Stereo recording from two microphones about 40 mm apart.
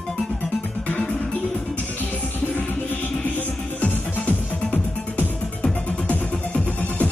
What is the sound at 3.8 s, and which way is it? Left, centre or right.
Music, left.